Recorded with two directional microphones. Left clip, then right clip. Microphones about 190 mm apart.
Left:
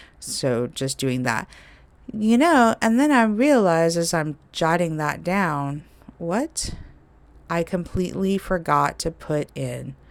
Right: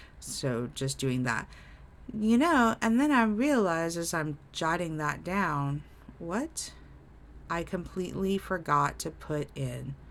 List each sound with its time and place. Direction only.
0.0 s speech: 35° left (ahead or behind)